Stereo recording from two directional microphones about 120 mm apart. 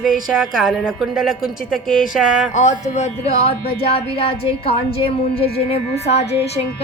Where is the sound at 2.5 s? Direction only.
75° left (ahead or behind).